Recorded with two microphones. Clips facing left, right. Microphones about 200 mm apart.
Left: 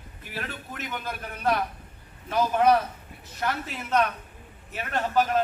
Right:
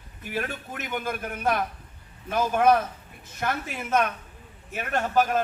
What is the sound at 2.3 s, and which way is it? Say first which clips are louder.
A man's voice: even; 50° right (ahead or behind).